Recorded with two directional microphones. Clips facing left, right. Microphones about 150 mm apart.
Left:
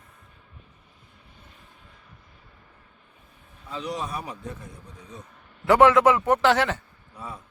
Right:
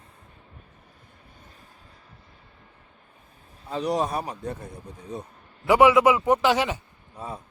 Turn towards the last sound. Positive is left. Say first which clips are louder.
# even
turn(degrees=-10)  # may be behind; listen again after turning